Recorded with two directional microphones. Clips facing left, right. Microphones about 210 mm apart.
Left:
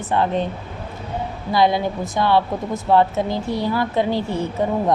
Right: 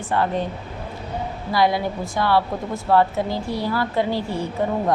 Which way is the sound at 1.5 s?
20° left (ahead or behind).